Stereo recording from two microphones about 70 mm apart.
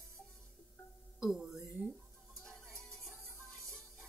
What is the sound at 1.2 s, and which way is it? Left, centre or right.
Music, centre.